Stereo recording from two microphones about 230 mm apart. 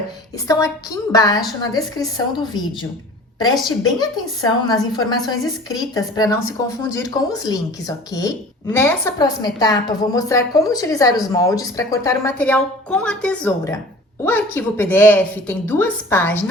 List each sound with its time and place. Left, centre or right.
0.4 s a woman's voice: centre